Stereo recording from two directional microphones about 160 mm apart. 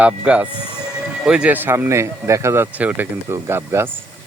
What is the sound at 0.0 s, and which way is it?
Speech, 10° right (ahead or behind).